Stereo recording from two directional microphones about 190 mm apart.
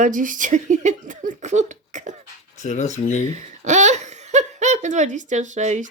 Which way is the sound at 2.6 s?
40° left (ahead or behind).